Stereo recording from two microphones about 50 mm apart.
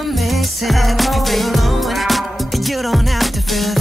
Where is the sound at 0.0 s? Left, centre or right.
Centre.